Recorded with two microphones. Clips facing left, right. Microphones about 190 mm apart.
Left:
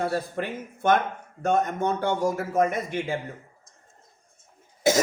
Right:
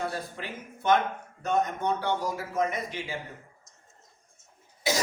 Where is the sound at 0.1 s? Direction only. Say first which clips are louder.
Left 8 dB; 55° left (ahead or behind).